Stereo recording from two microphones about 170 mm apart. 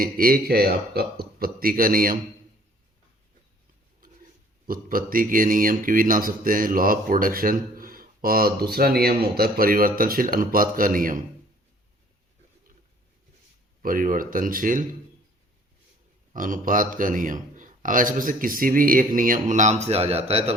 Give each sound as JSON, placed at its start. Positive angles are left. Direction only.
{"t": 0.0, "sound": "speech", "side_deg": -60}
{"t": 4.6, "sound": "speech", "side_deg": -60}
{"t": 13.8, "sound": "a man's voice", "side_deg": -55}
{"t": 16.3, "sound": "a man's voice", "side_deg": -50}